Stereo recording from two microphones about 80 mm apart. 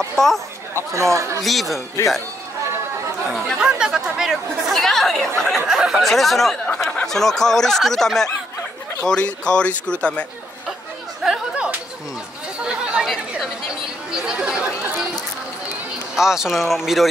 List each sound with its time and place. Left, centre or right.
0.2 s speech: centre
0.9 s speech: right
1.4 s speech: centre
3.3 s chatter: centre
3.5 s speech: centre
4.7 s speech: centre
11.2 s a sound: centre
12.6 s chatter: centre
14.1 s chatter: centre
16.2 s speech: centre